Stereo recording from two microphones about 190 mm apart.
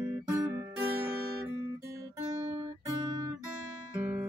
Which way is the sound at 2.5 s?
20° right (ahead or behind).